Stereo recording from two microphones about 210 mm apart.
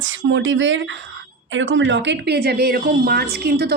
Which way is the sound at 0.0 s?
65° right (ahead or behind).